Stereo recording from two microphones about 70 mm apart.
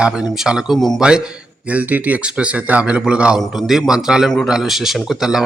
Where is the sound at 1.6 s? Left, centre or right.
Right.